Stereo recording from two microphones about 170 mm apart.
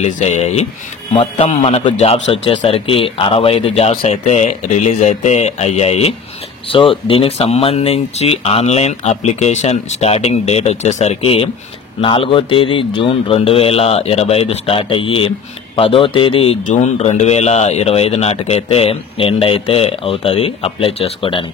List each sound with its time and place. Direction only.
0.0 s a man's voice: 40° left (ahead or behind)
16.6 s a man's voice: 45° left (ahead or behind)